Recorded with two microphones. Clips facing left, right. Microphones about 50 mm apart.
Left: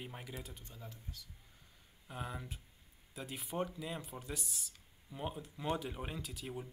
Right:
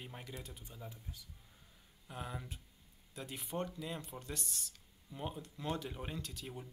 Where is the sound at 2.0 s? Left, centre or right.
Centre.